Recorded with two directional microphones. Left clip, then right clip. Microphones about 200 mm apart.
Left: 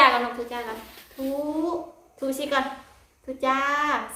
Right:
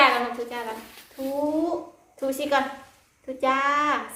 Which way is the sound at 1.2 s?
5° right (ahead or behind).